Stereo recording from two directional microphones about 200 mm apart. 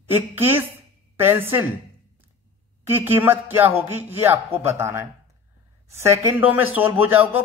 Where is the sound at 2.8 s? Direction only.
10° right (ahead or behind).